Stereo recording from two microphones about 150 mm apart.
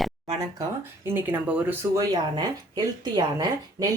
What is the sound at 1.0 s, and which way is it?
Speech, 15° right (ahead or behind).